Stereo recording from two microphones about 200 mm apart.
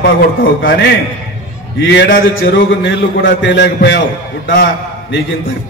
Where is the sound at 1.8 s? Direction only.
60° left (ahead or behind).